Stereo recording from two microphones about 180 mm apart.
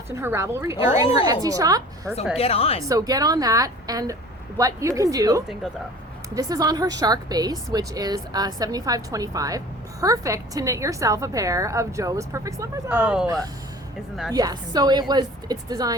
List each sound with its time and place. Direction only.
0.1 s a woman's voice: 15° right (ahead or behind)
1.0 s a woman's voice: 30° left (ahead or behind)
1.3 s a woman's voice: 20° right (ahead or behind)
2.4 s a woman's voice: 35° left (ahead or behind)
2.9 s a woman's voice: 20° right (ahead or behind)
12.9 s speech: 5° right (ahead or behind)
14.3 s a woman's voice: 20° right (ahead or behind)